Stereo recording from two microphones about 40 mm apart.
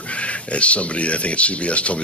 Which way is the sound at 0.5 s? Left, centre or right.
Left.